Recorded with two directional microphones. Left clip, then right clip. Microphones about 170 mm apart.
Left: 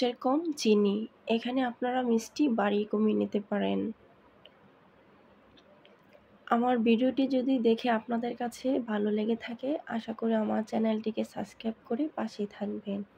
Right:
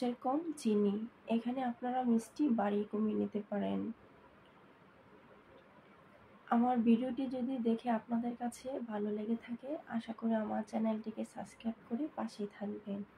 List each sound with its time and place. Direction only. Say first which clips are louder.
0.0 s speech: left 7 dB; 55° left (ahead or behind)
6.5 s speech: left 6 dB; 55° left (ahead or behind)